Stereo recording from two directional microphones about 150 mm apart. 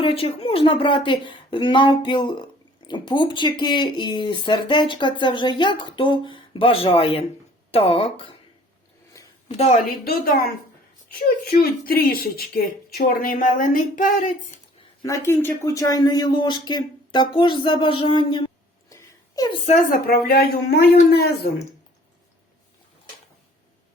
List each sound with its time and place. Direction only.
0.0 s speech: 40° left (ahead or behind)
9.6 s a woman's voice: 50° left (ahead or behind)
11.6 s speech: 85° left; by 14.3 s 60° left (ahead or behind)
15.0 s speech: 20° left (ahead or behind); by 18.4 s 35° left (ahead or behind)
18.9 s a sound: 25° left (ahead or behind)
19.9 s a woman's voice: 90° left